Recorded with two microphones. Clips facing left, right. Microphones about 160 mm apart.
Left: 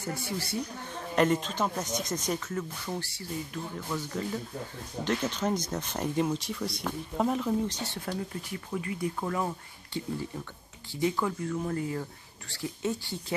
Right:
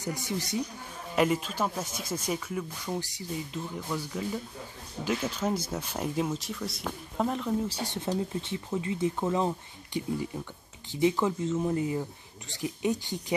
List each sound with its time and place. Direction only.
0.0 s speech: 15° right (ahead or behind)
1.1 s speech: 5° right (ahead or behind)
7.7 s speech: 15° right (ahead or behind)